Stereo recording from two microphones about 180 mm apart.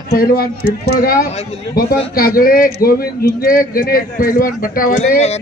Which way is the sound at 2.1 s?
55° left (ahead or behind).